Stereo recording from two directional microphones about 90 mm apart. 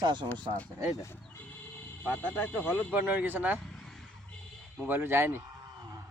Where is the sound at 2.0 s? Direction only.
15° left (ahead or behind).